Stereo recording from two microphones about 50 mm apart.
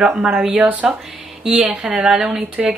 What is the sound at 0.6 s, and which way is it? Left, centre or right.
Speech, right.